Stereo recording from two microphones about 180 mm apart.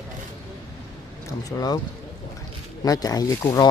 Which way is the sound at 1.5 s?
15° left (ahead or behind).